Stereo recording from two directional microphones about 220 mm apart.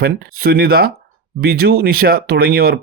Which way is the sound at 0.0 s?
45° right (ahead or behind).